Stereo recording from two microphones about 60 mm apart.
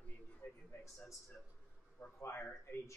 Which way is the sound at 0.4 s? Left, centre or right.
Left.